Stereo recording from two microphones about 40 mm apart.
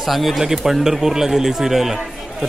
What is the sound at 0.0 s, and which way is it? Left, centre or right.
A man's voice, centre.